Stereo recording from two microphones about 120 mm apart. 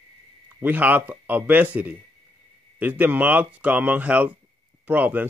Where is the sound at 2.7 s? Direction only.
15° right (ahead or behind).